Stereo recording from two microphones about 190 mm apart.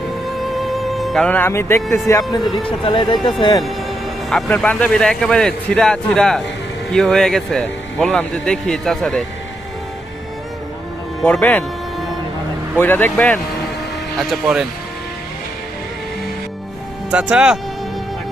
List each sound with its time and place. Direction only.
0.5 s speech: centre (ahead or behind); by 3.3 s 25° left (ahead or behind)
4.3 s speech: centre (ahead or behind)
11.2 s music: 5° left (ahead or behind)
12.8 s speech: 10° left (ahead or behind)
14.2 s speech: 5° right (ahead or behind)
17.1 s speech: 5° right (ahead or behind)